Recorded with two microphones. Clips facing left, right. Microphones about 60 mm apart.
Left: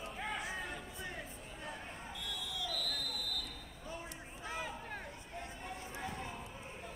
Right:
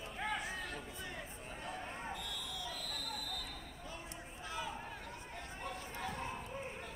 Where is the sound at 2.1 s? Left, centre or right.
Right.